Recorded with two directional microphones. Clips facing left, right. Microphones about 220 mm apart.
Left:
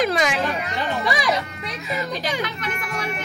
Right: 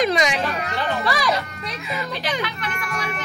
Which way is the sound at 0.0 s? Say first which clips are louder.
Right 1 dB; 5° left (ahead or behind).